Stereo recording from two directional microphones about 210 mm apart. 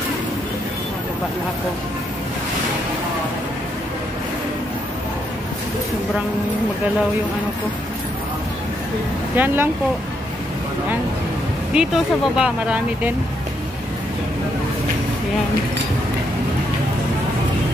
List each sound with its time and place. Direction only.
9.3 s speech: 10° right (ahead or behind)
11.7 s speech: 5° right (ahead or behind)